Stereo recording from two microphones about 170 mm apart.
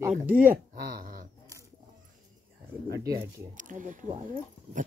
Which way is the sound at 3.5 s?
50° right (ahead or behind).